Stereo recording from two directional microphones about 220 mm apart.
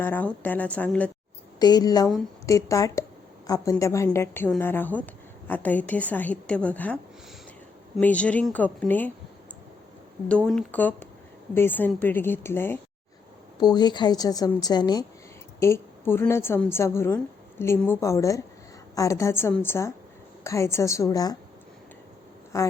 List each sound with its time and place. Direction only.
0.0 s a woman's voice: 10° left (ahead or behind)
1.5 s a woman's voice: 20° left (ahead or behind)
10.2 s a woman's voice: 5° left (ahead or behind)
22.5 s a woman's voice: 15° left (ahead or behind)